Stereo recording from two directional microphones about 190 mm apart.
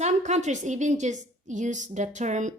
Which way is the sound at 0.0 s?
35° right (ahead or behind).